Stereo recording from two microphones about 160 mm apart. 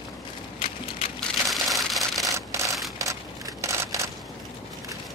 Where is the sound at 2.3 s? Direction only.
20° right (ahead or behind).